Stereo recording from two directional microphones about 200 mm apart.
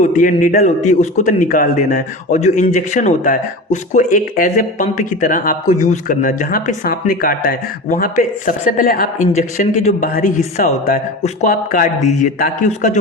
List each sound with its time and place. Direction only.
0.0 s a man's voice: 40° left (ahead or behind)